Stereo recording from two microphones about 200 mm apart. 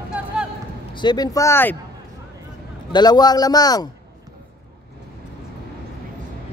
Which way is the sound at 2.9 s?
20° left (ahead or behind).